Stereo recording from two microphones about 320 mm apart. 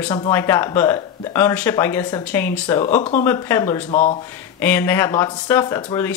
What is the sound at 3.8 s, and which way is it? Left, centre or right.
Speech, left.